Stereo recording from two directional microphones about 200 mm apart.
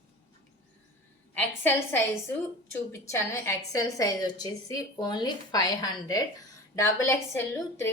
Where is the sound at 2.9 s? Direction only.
15° left (ahead or behind).